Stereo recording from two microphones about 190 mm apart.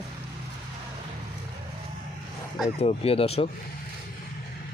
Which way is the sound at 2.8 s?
30° left (ahead or behind).